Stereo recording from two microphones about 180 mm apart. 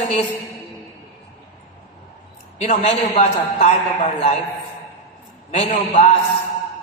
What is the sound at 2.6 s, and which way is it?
A man's voice, 35° left (ahead or behind).